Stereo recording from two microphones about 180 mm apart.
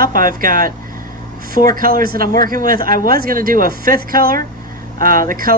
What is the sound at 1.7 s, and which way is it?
A woman's voice, 55° right (ahead or behind).